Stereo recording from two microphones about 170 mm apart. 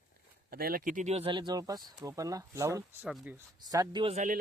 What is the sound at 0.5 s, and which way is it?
Speech, 60° right (ahead or behind).